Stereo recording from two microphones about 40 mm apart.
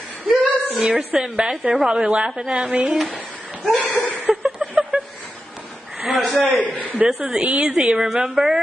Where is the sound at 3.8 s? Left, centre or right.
Left.